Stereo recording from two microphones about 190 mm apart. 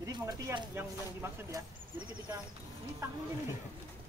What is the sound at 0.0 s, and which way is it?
Speech, 15° right (ahead or behind).